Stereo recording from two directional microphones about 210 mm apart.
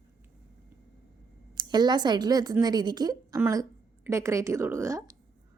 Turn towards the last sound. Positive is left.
turn(degrees=-15)  # may be behind; listen again after turning